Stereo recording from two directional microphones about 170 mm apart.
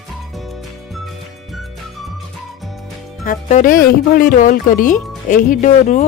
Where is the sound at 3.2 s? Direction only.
50° left (ahead or behind).